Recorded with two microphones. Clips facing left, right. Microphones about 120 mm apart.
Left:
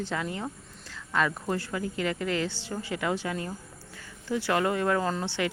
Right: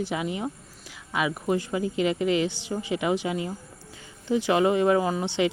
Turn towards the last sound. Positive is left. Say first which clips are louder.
# right 4 dB
turn(degrees=-15)  # may be behind; listen again after turning